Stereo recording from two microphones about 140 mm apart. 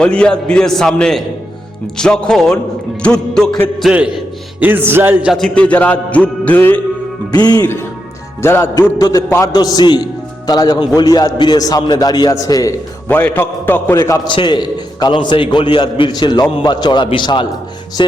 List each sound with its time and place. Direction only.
0.0 s music: 5° left (ahead or behind)
2.0 s speech: 5° left (ahead or behind)
3.0 s music: 5° left (ahead or behind)
3.8 s speech: 5° right (ahead or behind)
4.6 s music: 15° right (ahead or behind)
5.3 s music: 5° left (ahead or behind)
8.4 s a man's voice: 20° left (ahead or behind)
13.1 s music: 10° left (ahead or behind)
14.3 s a man's voice: 35° left (ahead or behind)